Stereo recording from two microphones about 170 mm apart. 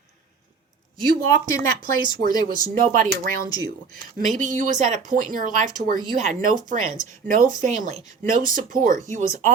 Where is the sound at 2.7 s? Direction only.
55° right (ahead or behind).